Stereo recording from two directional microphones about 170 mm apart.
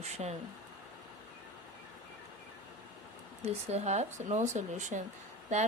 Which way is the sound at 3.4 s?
40° right (ahead or behind).